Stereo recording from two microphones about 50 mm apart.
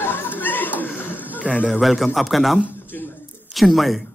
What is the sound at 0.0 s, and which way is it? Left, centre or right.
Chuckle, left.